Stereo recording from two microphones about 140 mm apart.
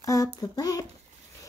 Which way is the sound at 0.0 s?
25° left (ahead or behind).